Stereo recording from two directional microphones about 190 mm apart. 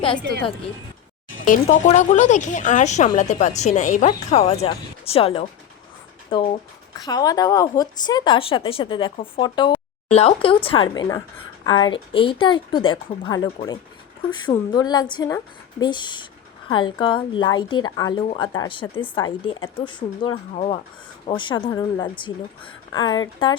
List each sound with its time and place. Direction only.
1.5 s a woman's voice: 40° left (ahead or behind); by 13.5 s 20° left (ahead or behind)
14.5 s a woman's voice: 20° left (ahead or behind)